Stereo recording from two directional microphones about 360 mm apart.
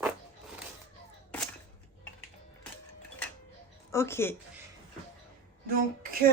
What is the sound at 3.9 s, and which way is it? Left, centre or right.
Speech, centre.